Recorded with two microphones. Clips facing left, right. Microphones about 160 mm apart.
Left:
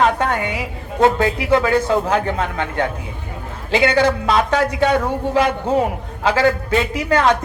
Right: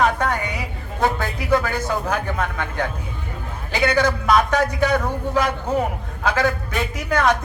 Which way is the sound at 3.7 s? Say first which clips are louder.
Left 4 dB; 30° left (ahead or behind).